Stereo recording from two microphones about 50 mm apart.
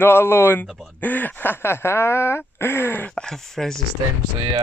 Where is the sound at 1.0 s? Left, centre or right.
Left.